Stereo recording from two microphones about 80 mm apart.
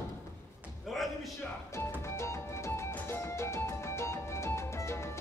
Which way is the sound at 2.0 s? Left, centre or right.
Left.